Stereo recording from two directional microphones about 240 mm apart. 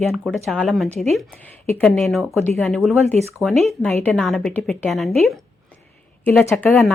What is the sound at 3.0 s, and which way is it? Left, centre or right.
Speech, right.